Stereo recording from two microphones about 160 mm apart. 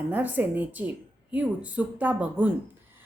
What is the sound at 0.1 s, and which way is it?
A woman's voice, 10° right (ahead or behind).